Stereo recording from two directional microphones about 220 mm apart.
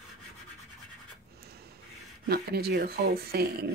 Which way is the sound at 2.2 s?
45° right (ahead or behind).